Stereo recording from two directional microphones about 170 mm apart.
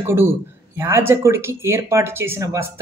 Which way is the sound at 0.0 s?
15° right (ahead or behind).